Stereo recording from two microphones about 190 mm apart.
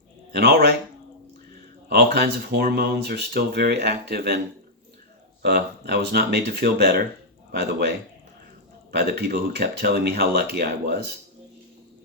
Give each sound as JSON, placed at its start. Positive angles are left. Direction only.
{"t": 0.3, "sound": "speech", "side_deg": -60}
{"t": 1.9, "sound": "speech", "side_deg": -60}
{"t": 5.4, "sound": "speech", "side_deg": -60}